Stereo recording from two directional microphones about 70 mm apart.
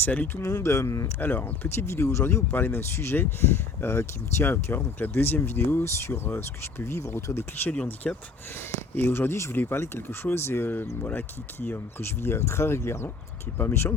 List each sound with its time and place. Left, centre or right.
0.0 s speech: left
0.3 s speech: left
1.2 s speech: left
1.9 s speech: left
2.5 s speech: left
8.0 s speech: centre
9.0 s speech: left